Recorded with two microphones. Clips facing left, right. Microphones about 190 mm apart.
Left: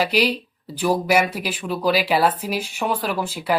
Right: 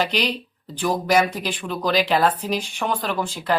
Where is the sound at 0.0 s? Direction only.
5° left (ahead or behind).